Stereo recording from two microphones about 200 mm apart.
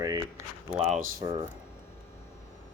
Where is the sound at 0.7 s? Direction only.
5° right (ahead or behind).